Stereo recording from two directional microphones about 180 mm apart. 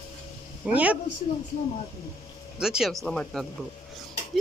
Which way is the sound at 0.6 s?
10° right (ahead or behind).